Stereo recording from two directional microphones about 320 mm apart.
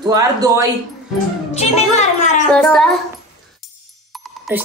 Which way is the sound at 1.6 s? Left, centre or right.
Left.